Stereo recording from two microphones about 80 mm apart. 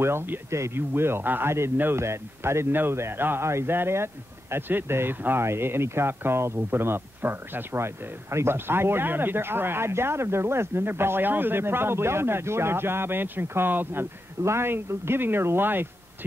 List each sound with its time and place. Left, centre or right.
0.0 s speech: right